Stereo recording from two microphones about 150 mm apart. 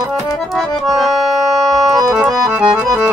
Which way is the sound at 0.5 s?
Centre (ahead or behind).